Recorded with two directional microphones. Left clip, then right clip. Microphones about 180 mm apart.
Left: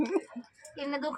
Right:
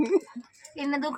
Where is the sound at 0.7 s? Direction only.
40° right (ahead or behind).